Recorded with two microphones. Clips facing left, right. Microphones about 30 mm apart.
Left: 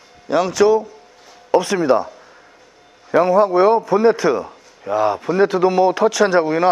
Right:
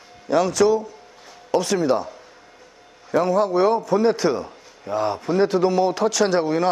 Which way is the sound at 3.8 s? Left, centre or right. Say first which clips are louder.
Left 3 dB; left.